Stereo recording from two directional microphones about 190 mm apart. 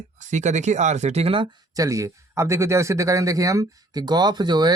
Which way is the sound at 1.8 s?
15° right (ahead or behind).